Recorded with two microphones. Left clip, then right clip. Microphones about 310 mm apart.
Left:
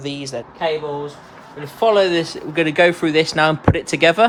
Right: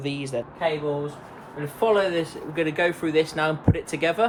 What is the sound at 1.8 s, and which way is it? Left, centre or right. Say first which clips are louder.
Speech: left 7 dB; left.